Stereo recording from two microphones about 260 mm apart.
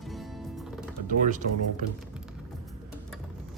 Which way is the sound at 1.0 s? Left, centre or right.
Right.